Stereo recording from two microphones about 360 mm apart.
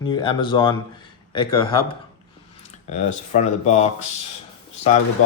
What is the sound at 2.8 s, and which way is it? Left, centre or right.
Speech, centre.